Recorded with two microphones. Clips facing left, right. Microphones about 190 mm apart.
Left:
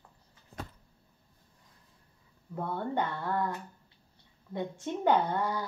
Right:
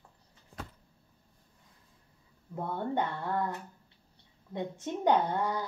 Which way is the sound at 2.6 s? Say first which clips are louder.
Even; 15° right (ahead or behind).